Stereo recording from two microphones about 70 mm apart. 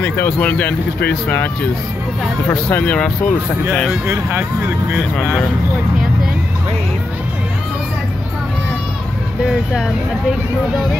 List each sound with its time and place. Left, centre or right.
0.0 s speech: left
2.7 s speech: centre
9.4 s speech: centre